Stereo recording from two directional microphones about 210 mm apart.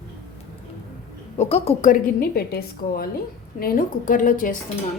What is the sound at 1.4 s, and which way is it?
A woman's voice, 30° left (ahead or behind).